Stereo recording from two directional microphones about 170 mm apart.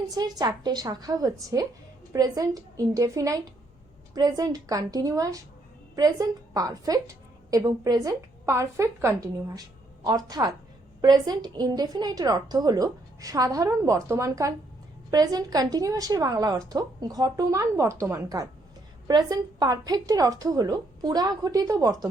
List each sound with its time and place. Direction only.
0.1 s a woman's voice: 20° right (ahead or behind)